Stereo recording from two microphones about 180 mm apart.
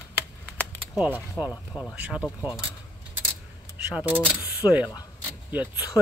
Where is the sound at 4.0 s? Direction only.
10° right (ahead or behind).